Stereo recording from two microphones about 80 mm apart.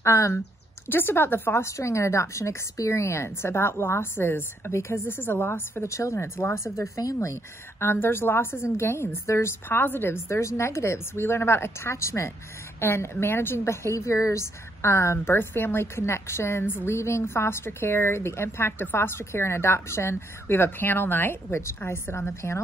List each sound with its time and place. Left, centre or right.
0.0 s a woman's voice: left
0.8 s a woman's voice: left
7.8 s a woman's voice: left